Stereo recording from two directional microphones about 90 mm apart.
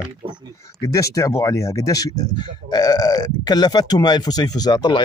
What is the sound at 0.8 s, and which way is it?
Speech, 35° left (ahead or behind).